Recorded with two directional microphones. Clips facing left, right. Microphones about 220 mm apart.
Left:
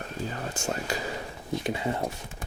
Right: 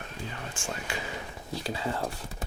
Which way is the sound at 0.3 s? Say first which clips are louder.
Left 5 dB; 40° left (ahead or behind).